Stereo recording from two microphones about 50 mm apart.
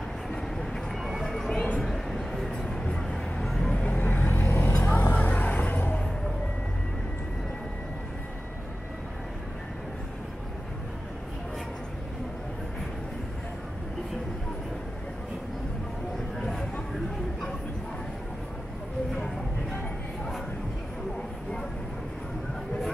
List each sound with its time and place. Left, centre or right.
1.0 s music: centre
1.5 s music: left
1.8 s a sound: centre
2.9 s vehicle: centre
3.7 s vehicle: left
4.8 s music: left